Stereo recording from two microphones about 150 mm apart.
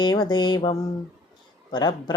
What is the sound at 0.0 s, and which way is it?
Speech, 30° left (ahead or behind).